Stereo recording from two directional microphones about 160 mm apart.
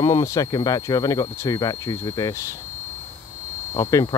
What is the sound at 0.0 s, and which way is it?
Cricket, 20° left (ahead or behind).